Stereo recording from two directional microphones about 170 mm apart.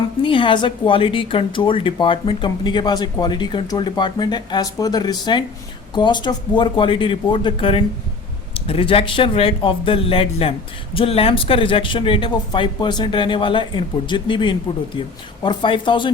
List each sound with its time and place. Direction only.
0.2 s speech: 30° left (ahead or behind)